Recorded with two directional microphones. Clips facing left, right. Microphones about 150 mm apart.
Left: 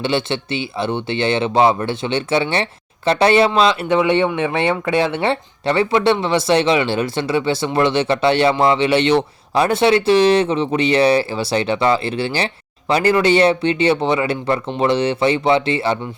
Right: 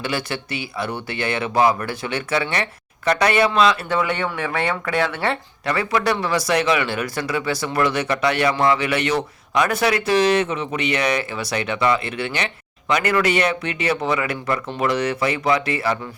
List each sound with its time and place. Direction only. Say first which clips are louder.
0.0 s speech: left 6 dB; 25° left (ahead or behind)